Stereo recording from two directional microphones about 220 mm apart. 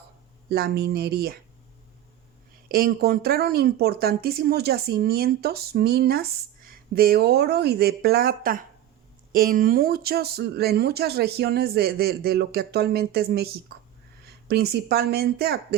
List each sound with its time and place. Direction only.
0.5 s speech: 45° right (ahead or behind)
2.7 s speech: 45° right (ahead or behind)